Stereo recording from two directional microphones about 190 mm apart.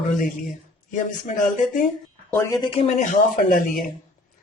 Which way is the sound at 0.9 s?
40° left (ahead or behind).